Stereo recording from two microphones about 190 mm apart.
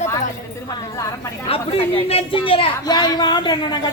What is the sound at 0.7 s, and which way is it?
Speech, 20° left (ahead or behind).